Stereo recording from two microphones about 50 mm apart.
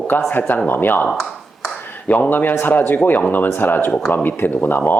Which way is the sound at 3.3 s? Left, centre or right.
Left.